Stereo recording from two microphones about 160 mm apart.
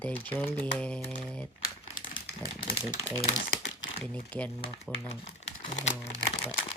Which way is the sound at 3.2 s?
45° left (ahead or behind).